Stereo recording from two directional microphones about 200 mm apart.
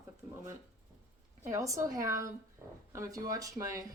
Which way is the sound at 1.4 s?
15° right (ahead or behind).